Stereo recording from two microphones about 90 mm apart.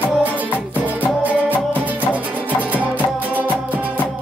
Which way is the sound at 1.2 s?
20° right (ahead or behind).